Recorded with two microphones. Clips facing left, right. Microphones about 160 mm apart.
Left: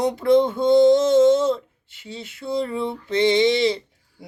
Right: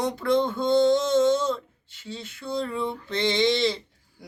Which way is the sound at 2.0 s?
Centre (ahead or behind).